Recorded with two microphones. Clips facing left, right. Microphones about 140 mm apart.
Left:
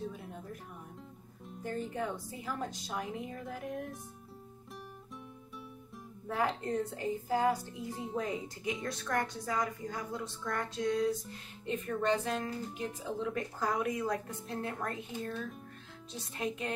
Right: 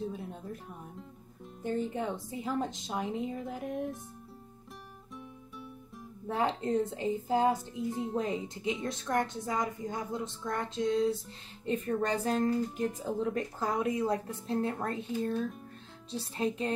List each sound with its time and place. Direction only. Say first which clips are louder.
0.1 s music: right 5 dB; 25° right (ahead or behind)
1.6 s a woman's voice: right 4 dB; 20° right (ahead or behind)
6.2 s a woman's voice: right 3 dB; 25° right (ahead or behind)
7.9 s speech: right 4 dB; centre (ahead or behind)
8.8 s a woman's voice: right 2 dB; 25° right (ahead or behind)
11.6 s speech: right 2 dB; 35° right (ahead or behind)
13.6 s a woman's voice: right 2 dB; 30° right (ahead or behind)